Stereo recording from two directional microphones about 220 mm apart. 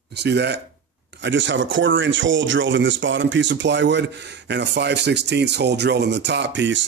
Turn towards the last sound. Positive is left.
turn(degrees=-55)  # may be behind; listen again after turning